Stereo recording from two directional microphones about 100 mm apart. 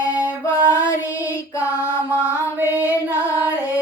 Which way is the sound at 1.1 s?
35° left (ahead or behind).